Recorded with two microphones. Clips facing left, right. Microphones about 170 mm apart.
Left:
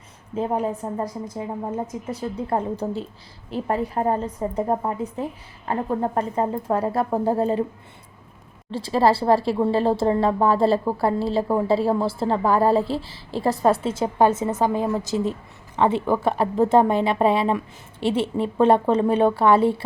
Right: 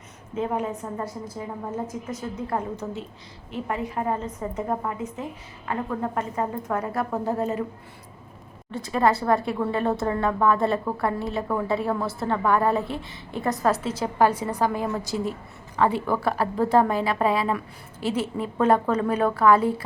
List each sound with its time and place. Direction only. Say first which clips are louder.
0.3 s a woman's voice: left 3 dB; 35° left (ahead or behind)
8.7 s a woman's voice: left 3 dB; 30° left (ahead or behind)